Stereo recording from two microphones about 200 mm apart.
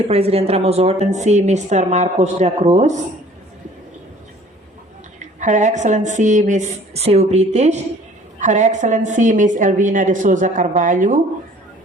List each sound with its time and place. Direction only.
0.1 s a woman's voice: 30° right (ahead or behind)
5.2 s a woman's voice: 35° right (ahead or behind)